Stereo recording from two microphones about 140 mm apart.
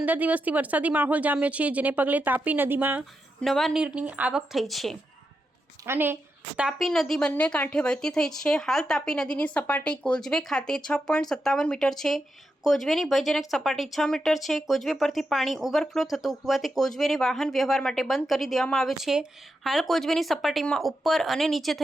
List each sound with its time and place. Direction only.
0.0 s speech: 10° right (ahead or behind)
3.4 s speech: centre (ahead or behind)
5.8 s speech: 15° right (ahead or behind)
6.6 s speech: centre (ahead or behind)